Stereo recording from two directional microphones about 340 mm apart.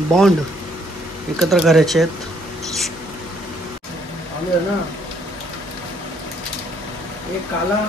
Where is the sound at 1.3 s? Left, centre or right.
Centre.